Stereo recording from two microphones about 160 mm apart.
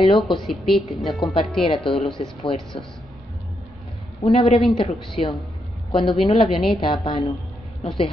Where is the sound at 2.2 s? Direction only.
45° left (ahead or behind).